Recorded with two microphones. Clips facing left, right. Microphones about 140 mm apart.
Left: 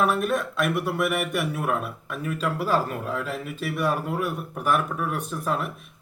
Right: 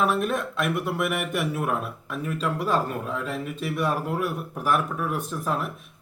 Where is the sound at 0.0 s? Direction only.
Centre (ahead or behind).